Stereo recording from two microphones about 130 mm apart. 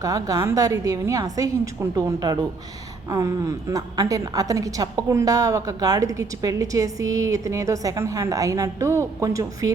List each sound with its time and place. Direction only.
0.0 s a woman's voice: 25° right (ahead or behind)